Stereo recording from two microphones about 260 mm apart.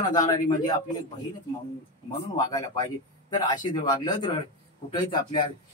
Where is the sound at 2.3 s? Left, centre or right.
Centre.